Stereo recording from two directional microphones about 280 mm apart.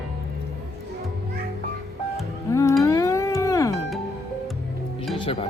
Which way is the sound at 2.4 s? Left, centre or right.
Centre.